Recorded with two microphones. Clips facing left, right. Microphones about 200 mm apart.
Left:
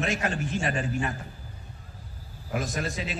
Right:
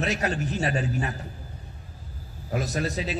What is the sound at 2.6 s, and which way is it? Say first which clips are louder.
Speech: right 3 dB; 40° right (ahead or behind).